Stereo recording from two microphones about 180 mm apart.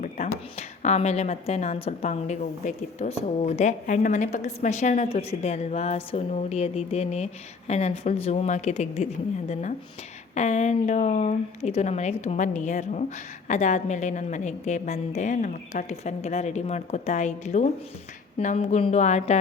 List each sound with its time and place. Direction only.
0.0 s a woman's voice: 40° left (ahead or behind)